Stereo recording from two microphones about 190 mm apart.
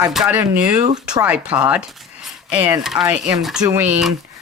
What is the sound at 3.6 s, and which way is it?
Speech, 20° right (ahead or behind).